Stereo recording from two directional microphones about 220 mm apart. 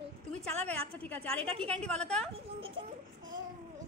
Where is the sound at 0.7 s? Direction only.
5° left (ahead or behind).